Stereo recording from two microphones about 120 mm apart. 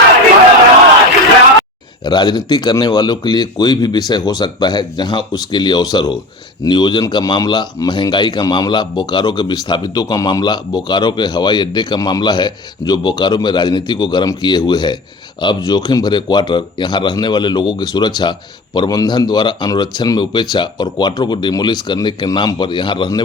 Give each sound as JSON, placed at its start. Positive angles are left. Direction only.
{"t": 2.0, "sound": "speech", "side_deg": 35}